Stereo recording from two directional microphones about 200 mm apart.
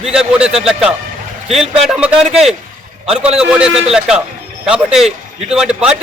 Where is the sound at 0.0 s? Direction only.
5° right (ahead or behind).